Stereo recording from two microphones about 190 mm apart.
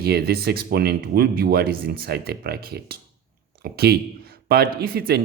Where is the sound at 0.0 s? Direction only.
55° right (ahead or behind).